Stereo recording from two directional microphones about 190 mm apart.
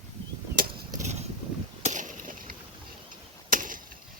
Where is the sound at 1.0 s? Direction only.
35° right (ahead or behind).